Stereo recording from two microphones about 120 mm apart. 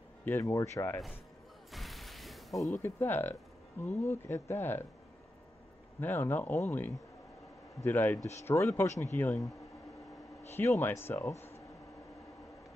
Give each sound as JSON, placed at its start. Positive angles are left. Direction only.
{"t": 0.2, "sound": "speech", "side_deg": 15}
{"t": 1.7, "sound": "a sound", "side_deg": 0}
{"t": 2.7, "sound": "speech", "side_deg": 15}
{"t": 5.9, "sound": "speech", "side_deg": 15}
{"t": 7.8, "sound": "speech", "side_deg": 15}
{"t": 10.5, "sound": "speech", "side_deg": 20}